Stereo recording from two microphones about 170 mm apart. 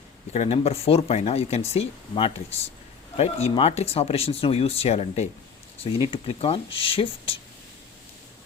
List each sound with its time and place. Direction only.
0.3 s speech: 35° left (ahead or behind)